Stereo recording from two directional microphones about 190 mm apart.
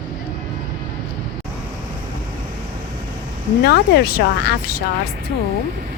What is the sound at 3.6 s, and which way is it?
Speech, 55° left (ahead or behind).